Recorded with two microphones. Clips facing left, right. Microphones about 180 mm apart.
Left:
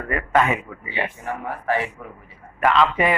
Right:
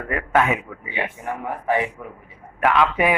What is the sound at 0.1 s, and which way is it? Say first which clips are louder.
Speech: even; 5° right (ahead or behind).